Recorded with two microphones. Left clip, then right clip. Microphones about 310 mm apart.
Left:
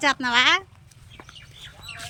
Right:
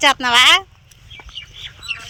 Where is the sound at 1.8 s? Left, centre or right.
Left.